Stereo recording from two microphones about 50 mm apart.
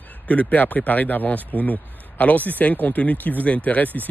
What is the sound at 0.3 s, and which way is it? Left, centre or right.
Speech, left.